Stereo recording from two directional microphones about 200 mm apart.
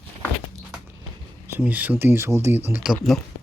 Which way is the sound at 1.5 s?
10° right (ahead or behind).